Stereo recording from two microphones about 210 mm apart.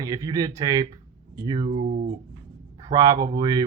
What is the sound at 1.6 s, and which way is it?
Speech, 30° right (ahead or behind).